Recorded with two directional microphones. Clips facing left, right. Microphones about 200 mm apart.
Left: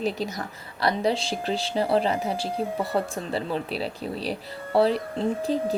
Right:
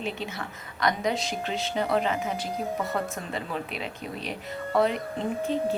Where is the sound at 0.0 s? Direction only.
35° left (ahead or behind).